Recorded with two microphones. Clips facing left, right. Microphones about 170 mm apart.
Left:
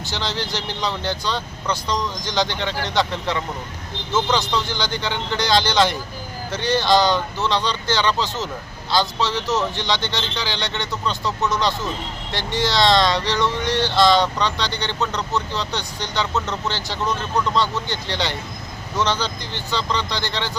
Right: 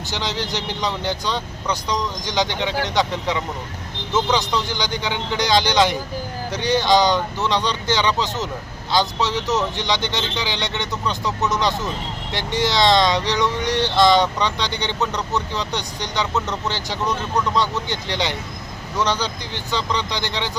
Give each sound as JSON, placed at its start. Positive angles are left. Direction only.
{"t": 0.1, "sound": "speech", "side_deg": -15}